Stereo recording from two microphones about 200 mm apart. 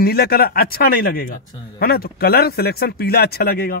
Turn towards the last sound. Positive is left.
turn(degrees=50)  # may be behind; listen again after turning